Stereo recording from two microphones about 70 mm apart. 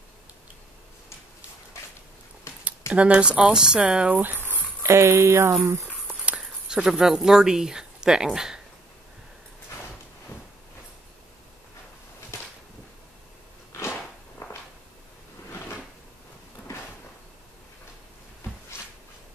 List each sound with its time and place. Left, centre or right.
2.9 s speech: centre
4.8 s speech: right
6.3 s speech: centre
13.7 s a sound: left